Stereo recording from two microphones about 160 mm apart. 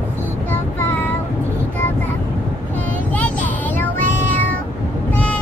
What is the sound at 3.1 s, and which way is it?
Child singing, 10° left (ahead or behind).